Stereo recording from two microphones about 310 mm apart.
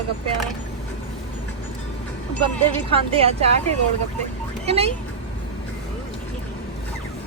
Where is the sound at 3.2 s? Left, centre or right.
Centre.